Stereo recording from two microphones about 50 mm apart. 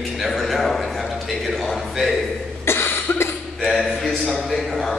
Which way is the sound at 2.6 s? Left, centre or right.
Left.